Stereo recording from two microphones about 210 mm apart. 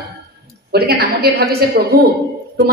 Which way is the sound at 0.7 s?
50° right (ahead or behind).